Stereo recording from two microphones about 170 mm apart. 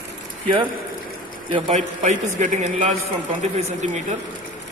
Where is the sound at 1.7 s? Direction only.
45° right (ahead or behind).